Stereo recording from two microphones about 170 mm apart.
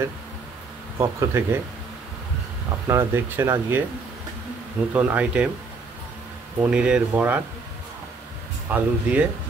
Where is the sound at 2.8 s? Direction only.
15° right (ahead or behind).